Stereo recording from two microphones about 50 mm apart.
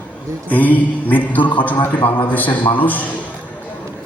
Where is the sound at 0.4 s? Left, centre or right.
Left.